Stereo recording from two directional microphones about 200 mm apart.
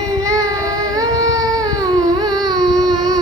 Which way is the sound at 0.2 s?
15° right (ahead or behind).